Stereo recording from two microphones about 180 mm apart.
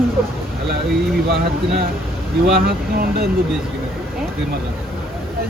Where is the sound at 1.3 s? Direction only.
60° right (ahead or behind).